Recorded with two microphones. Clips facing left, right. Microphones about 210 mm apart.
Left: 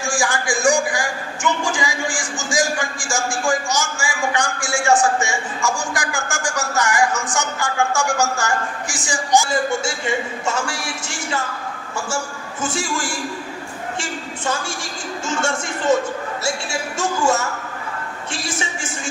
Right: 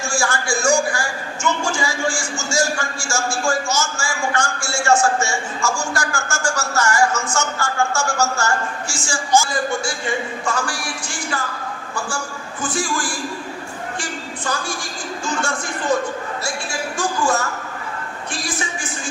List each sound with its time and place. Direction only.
0.0 s a man's voice: 15° left (ahead or behind)
17.0 s a woman's voice: 25° left (ahead or behind)